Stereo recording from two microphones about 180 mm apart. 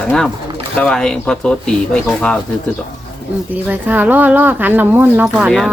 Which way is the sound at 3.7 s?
10° right (ahead or behind).